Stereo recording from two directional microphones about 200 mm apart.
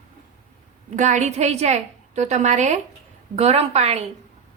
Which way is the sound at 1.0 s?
35° right (ahead or behind).